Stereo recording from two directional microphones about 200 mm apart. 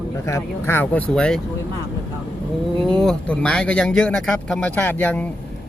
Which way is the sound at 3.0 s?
5° left (ahead or behind).